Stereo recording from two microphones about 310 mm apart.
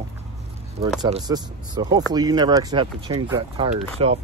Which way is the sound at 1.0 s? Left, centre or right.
Centre.